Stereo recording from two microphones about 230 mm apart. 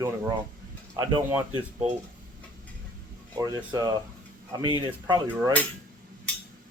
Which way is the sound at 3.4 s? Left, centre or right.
Centre.